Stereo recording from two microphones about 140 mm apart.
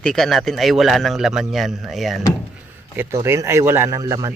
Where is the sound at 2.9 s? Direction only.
20° right (ahead or behind).